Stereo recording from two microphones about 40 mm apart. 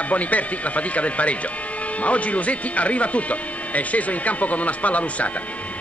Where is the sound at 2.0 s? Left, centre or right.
Left.